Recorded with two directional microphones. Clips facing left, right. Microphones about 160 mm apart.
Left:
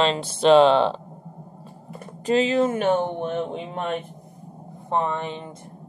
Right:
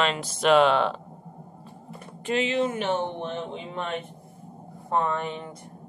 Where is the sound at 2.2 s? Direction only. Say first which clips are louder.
Left 5 dB; 40° left (ahead or behind).